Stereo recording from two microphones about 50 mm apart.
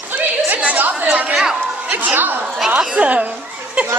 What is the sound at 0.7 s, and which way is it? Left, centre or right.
Speech, right.